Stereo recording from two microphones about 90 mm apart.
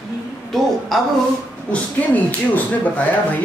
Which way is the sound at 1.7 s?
15° left (ahead or behind).